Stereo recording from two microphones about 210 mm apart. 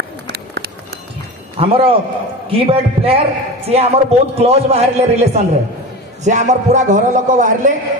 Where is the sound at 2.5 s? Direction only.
25° right (ahead or behind).